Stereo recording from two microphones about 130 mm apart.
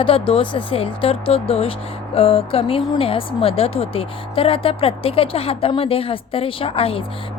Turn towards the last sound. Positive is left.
turn(degrees=45)  # may be behind; listen again after turning